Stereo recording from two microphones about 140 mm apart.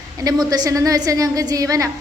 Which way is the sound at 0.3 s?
25° right (ahead or behind).